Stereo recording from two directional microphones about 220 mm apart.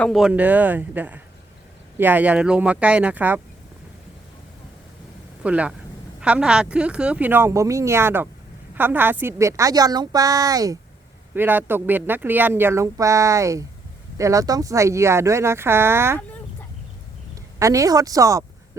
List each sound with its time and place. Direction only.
0.0 s speech: centre (ahead or behind)
5.4 s speech: 5° right (ahead or behind)
17.6 s speech: 15° right (ahead or behind)